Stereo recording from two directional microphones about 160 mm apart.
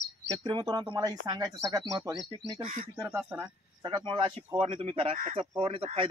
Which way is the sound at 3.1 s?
15° right (ahead or behind).